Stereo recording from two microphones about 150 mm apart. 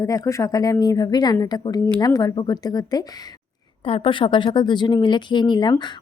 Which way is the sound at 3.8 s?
40° left (ahead or behind).